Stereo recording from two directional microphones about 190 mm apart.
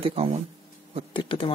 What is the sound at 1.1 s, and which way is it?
Speech, 25° left (ahead or behind).